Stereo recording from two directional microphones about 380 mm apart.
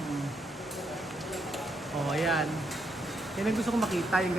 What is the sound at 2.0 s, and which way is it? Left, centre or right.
Speech, centre.